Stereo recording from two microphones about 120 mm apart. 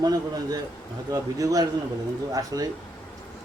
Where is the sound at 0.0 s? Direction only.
30° right (ahead or behind).